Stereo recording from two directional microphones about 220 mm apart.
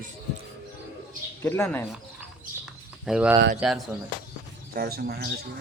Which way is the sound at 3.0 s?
5° right (ahead or behind).